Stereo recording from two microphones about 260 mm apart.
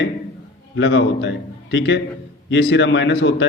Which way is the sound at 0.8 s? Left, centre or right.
Left.